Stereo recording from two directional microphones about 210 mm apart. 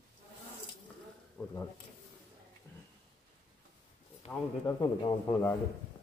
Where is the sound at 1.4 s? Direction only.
10° left (ahead or behind).